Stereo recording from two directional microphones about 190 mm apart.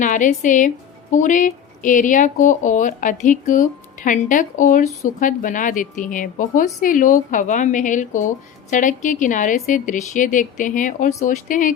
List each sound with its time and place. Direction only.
0.0 s a woman's voice: 40° left (ahead or behind)